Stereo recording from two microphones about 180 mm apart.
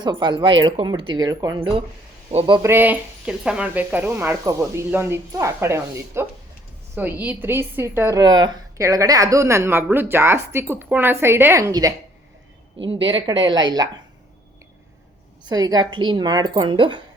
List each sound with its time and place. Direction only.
0.0 s a woman's voice: 25° right (ahead or behind)
2.3 s a man's voice: 35° right (ahead or behind)
2.6 s a woman's voice: 15° right (ahead or behind)
15.4 s a woman's voice: 20° right (ahead or behind)